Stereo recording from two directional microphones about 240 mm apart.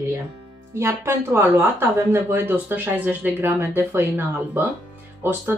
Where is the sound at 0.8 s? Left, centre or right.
Centre.